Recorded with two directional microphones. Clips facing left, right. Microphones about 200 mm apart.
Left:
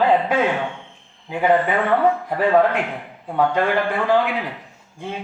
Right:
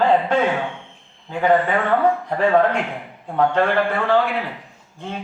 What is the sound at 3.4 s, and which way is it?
Speech, 10° left (ahead or behind).